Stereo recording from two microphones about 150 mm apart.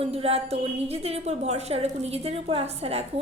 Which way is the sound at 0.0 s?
40° right (ahead or behind).